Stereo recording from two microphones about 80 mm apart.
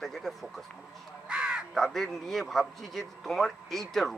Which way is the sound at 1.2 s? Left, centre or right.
Centre.